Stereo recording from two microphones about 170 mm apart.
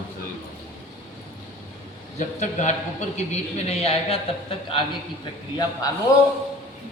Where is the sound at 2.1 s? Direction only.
45° left (ahead or behind).